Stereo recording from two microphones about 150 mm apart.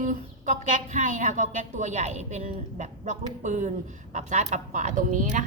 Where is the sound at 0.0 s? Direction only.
55° right (ahead or behind).